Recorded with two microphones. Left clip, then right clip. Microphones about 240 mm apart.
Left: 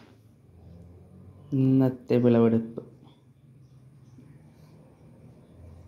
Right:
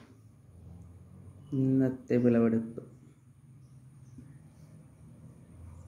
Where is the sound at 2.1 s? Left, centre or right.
Left.